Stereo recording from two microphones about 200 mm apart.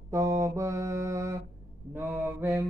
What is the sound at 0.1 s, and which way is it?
Mantra, 15° right (ahead or behind).